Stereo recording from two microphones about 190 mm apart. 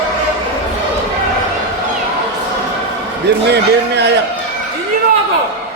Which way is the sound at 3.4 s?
60° right (ahead or behind).